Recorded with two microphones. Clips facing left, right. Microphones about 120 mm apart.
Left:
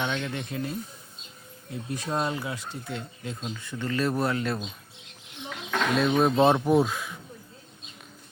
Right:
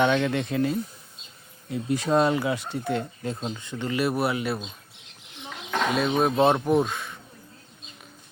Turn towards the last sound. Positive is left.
turn(degrees=5)  # may be behind; listen again after turning